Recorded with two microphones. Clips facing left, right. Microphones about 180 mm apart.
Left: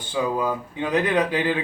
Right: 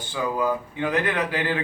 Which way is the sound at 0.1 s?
20° left (ahead or behind).